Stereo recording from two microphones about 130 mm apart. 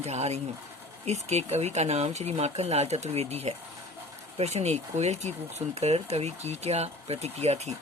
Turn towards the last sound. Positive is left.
turn(degrees=-55)  # may be behind; listen again after turning